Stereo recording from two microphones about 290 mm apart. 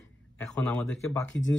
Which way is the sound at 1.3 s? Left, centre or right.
Left.